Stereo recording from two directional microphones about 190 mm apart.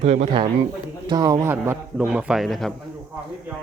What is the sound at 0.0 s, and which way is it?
A man's voice, 35° right (ahead or behind).